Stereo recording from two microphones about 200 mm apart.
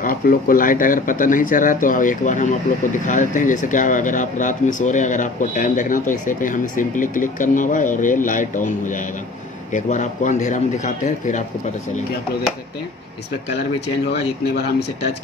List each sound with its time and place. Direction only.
0.0 s speech: 45° left (ahead or behind)
14.1 s speech: 55° left (ahead or behind)